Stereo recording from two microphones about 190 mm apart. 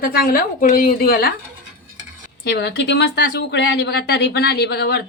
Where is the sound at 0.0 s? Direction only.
55° left (ahead or behind).